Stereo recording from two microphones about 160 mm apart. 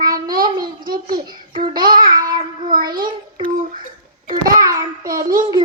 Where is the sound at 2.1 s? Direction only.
25° right (ahead or behind).